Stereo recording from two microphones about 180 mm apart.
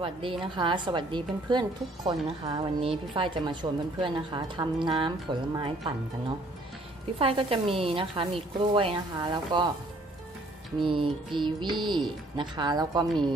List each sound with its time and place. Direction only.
0.0 s a woman's voice: 30° right (ahead or behind)
7.2 s a woman's voice: 30° right (ahead or behind)
10.8 s a woman's voice: 25° right (ahead or behind)